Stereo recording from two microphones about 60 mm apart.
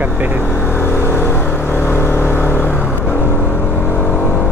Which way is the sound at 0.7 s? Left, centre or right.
Left.